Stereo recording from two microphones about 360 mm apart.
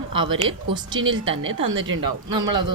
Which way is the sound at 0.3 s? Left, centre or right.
Right.